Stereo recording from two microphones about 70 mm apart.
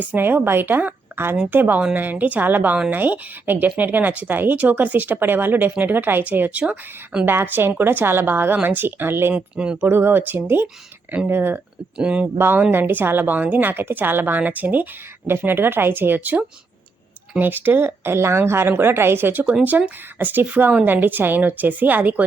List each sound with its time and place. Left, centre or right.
0.0 s speech: right
7.3 s speech: right
9.3 s speech: centre
9.8 s speech: right
11.9 s speech: centre
12.4 s speech: right